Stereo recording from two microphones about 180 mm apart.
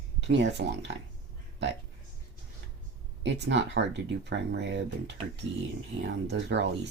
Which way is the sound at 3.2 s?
75° right (ahead or behind).